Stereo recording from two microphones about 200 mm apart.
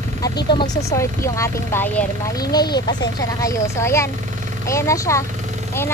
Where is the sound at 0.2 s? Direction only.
20° left (ahead or behind).